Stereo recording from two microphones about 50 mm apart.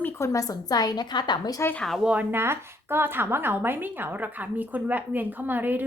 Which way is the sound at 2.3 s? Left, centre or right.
Right.